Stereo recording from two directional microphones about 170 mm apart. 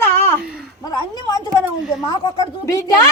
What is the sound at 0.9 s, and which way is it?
Speech, 25° left (ahead or behind).